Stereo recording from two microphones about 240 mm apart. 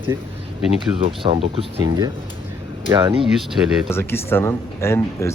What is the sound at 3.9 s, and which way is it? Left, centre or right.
Speech, centre.